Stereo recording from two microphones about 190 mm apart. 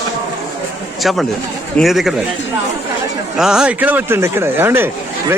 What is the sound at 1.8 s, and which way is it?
Speech, centre (ahead or behind).